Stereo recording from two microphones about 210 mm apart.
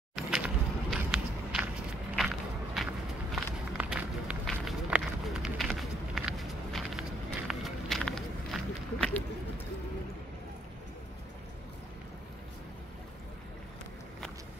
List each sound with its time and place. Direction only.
0.1 s a sound: centre (ahead or behind)
2.1 s walk: centre (ahead or behind)
3.7 s run: 5° right (ahead or behind)